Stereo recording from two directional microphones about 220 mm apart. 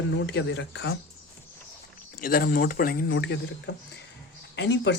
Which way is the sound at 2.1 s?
40° left (ahead or behind).